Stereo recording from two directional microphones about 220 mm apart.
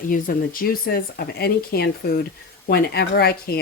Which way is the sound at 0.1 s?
40° left (ahead or behind).